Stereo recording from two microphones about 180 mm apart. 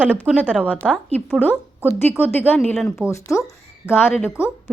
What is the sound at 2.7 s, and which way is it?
Speech, centre (ahead or behind).